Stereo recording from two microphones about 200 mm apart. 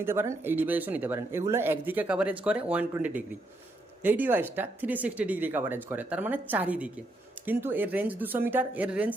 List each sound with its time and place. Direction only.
0.0 s speech: 10° right (ahead or behind)